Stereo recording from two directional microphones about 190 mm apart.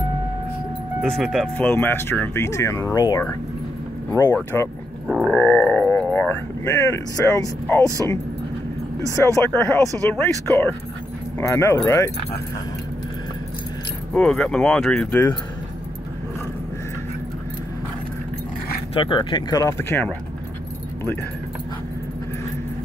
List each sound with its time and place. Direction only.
1.0 s speech: centre (ahead or behind)
5.0 s speech: centre (ahead or behind); by 7.8 s 15° left (ahead or behind)
9.1 s speech: 15° left (ahead or behind)
14.1 s speech: 5° left (ahead or behind)
18.9 s speech: 25° left (ahead or behind)